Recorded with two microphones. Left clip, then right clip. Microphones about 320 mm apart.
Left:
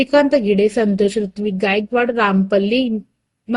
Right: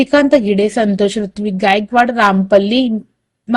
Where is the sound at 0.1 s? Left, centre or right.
Centre.